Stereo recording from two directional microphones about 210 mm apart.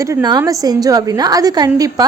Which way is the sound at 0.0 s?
15° right (ahead or behind).